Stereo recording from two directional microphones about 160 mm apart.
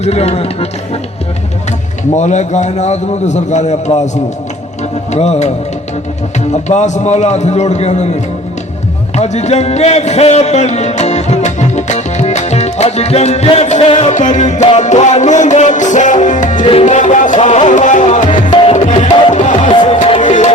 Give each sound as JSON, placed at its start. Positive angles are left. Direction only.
{"t": 0.0, "sound": "speech", "side_deg": 40}
{"t": 2.1, "sound": "a man's voice", "side_deg": 45}
{"t": 5.1, "sound": "a man's voice", "side_deg": 45}
{"t": 9.1, "sound": "a man's voice", "side_deg": 45}
{"t": 18.4, "sound": "music", "side_deg": 45}
{"t": 19.8, "sound": "music", "side_deg": 35}
{"t": 20.2, "sound": "tabla", "side_deg": 50}